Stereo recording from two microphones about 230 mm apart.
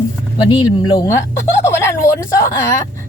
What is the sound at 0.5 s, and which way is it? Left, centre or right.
A woman's voice, centre.